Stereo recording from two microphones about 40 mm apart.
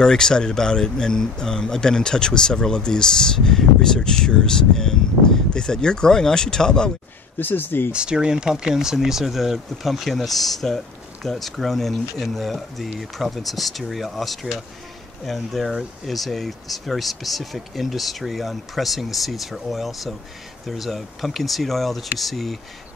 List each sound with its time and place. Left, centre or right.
0.0 s speech: centre
7.3 s speech: left
7.9 s speech: right; by 22.6 s centre